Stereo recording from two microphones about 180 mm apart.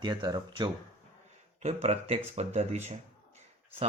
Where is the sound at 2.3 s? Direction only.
35° right (ahead or behind).